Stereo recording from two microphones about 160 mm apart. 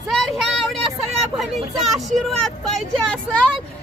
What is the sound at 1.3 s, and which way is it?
Speech, centre (ahead or behind).